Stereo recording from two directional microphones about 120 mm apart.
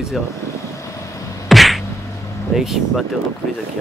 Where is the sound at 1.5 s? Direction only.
Centre (ahead or behind).